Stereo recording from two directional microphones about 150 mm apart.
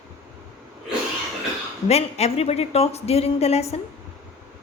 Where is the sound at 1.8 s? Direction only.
45° left (ahead or behind).